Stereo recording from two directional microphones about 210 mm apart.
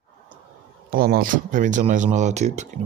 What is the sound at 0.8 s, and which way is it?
Speech, 45° right (ahead or behind).